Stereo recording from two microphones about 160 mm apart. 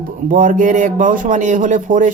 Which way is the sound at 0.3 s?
55° right (ahead or behind).